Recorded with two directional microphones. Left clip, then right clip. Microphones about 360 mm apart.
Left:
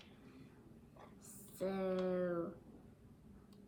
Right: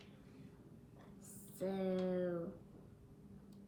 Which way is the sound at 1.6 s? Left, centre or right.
Centre.